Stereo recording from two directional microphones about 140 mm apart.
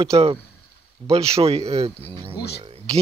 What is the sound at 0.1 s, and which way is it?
Speech, 40° right (ahead or behind).